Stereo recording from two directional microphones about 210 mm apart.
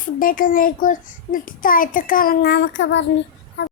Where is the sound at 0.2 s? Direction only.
40° left (ahead or behind); by 3.0 s 60° left (ahead or behind).